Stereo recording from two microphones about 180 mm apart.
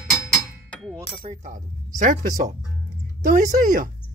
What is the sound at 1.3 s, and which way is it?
Speech, 45° right (ahead or behind).